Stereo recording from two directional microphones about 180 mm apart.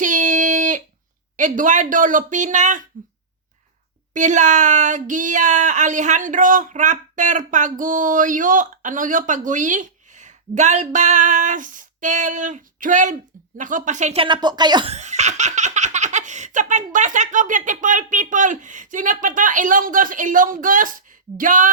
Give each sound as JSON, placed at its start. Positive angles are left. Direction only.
{"t": 0.0, "sound": "a sound", "side_deg": -45}
{"t": 1.4, "sound": "speech", "side_deg": -45}
{"t": 4.1, "sound": "speech", "side_deg": -45}
{"t": 14.9, "sound": "speech", "side_deg": -40}